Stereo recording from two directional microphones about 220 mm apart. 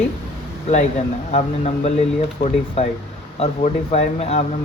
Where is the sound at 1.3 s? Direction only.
30° left (ahead or behind).